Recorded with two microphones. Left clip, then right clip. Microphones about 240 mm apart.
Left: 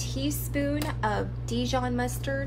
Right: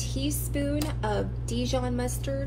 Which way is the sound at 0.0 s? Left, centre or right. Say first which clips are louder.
Even; left.